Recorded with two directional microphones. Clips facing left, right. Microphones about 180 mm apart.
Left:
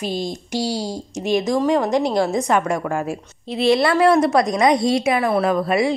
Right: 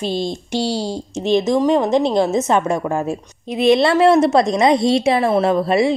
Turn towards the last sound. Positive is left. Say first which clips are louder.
# right 3 dB
turn(degrees=-25)  # may be behind; listen again after turning